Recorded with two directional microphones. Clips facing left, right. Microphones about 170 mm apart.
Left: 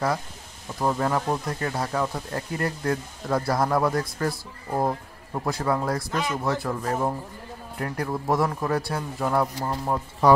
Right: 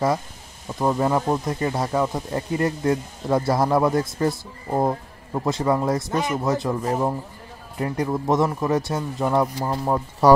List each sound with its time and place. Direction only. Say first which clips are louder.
0.8 s speech: right 4 dB; 15° right (ahead or behind)